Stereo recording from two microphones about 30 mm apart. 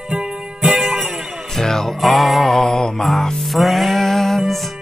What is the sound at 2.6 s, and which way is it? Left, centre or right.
Mantra, centre.